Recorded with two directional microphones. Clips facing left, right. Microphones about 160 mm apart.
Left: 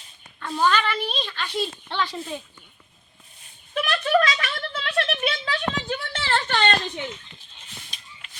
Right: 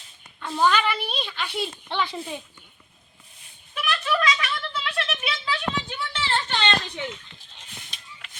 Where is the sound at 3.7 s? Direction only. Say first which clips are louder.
Left 5 dB; 40° left (ahead or behind).